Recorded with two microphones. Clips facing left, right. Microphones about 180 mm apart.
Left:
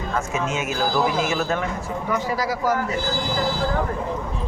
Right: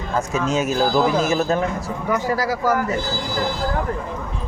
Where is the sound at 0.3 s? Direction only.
35° right (ahead or behind).